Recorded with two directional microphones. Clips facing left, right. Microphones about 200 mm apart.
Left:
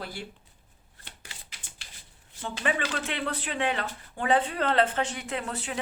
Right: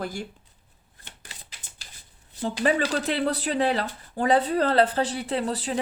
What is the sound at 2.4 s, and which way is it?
Speech, 35° right (ahead or behind).